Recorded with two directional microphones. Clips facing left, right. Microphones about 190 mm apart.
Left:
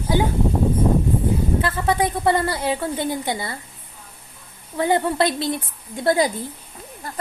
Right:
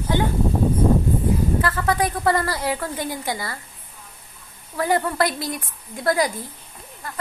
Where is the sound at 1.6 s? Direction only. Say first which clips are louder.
Left 1 dB; 25° left (ahead or behind).